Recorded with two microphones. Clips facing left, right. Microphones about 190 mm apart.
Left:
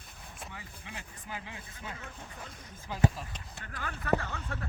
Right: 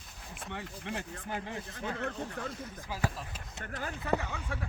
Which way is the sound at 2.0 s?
70° right (ahead or behind).